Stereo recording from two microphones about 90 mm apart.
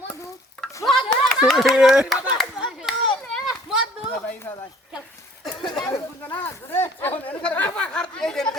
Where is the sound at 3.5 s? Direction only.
10° right (ahead or behind).